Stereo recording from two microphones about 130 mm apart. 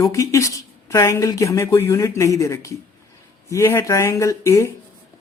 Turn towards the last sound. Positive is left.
turn(degrees=20)  # may be behind; listen again after turning